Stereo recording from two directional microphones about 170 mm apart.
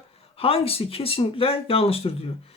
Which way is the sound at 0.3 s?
35° left (ahead or behind).